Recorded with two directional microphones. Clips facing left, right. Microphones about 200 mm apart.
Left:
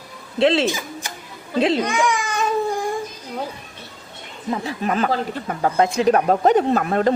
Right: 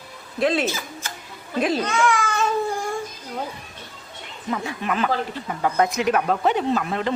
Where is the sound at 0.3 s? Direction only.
25° left (ahead or behind).